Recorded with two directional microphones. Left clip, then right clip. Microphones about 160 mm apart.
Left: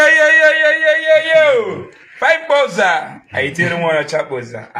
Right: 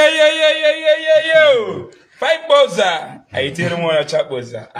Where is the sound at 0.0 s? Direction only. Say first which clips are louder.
Left 3 dB; 80° right.